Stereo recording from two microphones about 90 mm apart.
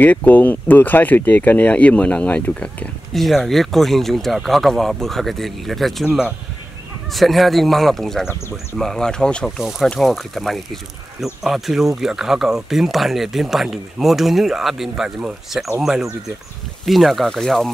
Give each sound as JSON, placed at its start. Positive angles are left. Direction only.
{"t": 0.0, "sound": "speech", "side_deg": 20}
{"t": 3.1, "sound": "speech", "side_deg": 0}
{"t": 6.0, "sound": "speech", "side_deg": -15}
{"t": 7.1, "sound": "speech", "side_deg": 0}
{"t": 9.6, "sound": "speech", "side_deg": -5}